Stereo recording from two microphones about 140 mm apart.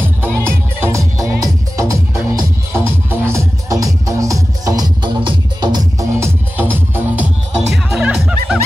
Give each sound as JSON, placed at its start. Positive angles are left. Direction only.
{"t": 0.4, "sound": "music", "side_deg": -15}
{"t": 6.1, "sound": "music", "side_deg": -15}